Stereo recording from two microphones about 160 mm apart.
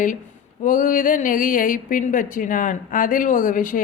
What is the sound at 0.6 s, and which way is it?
A woman's voice, 55° left (ahead or behind).